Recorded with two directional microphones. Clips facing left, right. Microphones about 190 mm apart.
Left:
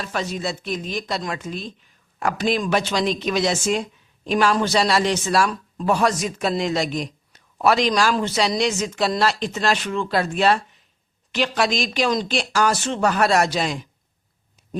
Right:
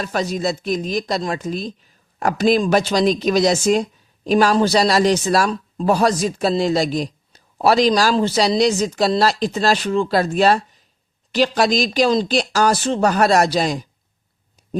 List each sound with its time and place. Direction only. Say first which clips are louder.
0.0 s a woman's voice: right 5 dB; 40° right (ahead or behind)